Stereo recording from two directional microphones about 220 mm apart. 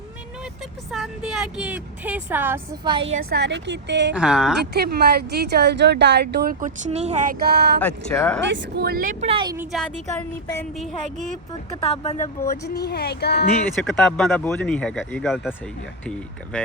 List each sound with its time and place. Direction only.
0.9 s speech: centre (ahead or behind)
2.8 s a woman's voice: 25° right (ahead or behind)
3.2 s speech: 50° right (ahead or behind)
4.1 s speech: 5° right (ahead or behind)
4.6 s speech: 45° right (ahead or behind)
7.8 s speech: 5° left (ahead or behind)
8.4 s speech: 55° right (ahead or behind)
9.2 s a woman's voice: 20° right (ahead or behind)
9.6 s speech: centre (ahead or behind)
11.8 s speech: 30° left (ahead or behind)
12.6 s speech: 45° left (ahead or behind)
13.8 s speech: centre (ahead or behind)